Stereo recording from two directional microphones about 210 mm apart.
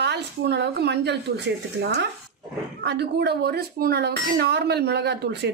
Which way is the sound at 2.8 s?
55° right (ahead or behind).